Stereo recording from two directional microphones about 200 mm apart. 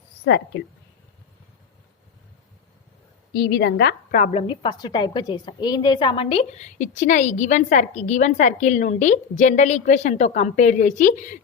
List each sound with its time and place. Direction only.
0.3 s a woman's voice: 60° left (ahead or behind)
3.3 s a woman's voice: 55° left (ahead or behind)
4.1 s a woman's voice: 35° left (ahead or behind)